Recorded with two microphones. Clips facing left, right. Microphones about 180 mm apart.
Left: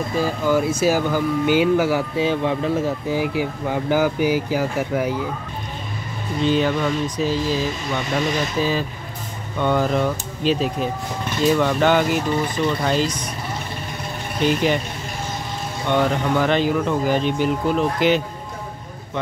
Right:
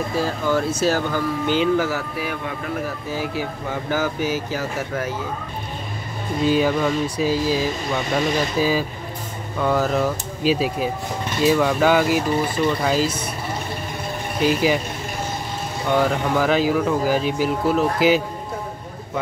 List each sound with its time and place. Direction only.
0.5 s speech: 10° left (ahead or behind)
2.1 s speech: 25° left (ahead or behind)
3.1 s speech: 15° left (ahead or behind)
6.4 s speech: 10° right (ahead or behind)
14.4 s speech: 5° right (ahead or behind)
15.9 s speech: 5° right (ahead or behind)